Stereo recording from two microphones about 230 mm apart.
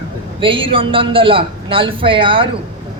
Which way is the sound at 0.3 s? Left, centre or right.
Right.